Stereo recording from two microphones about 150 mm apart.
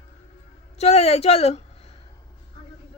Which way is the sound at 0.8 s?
45° left (ahead or behind).